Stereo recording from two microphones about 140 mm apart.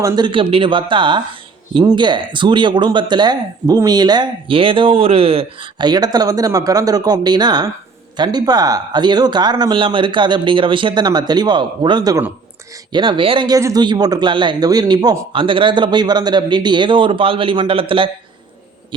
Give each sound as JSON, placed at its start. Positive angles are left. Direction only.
{"t": 0.0, "sound": "speech", "side_deg": -35}
{"t": 5.9, "sound": "speech", "side_deg": -30}
{"t": 13.6, "sound": "speech", "side_deg": -25}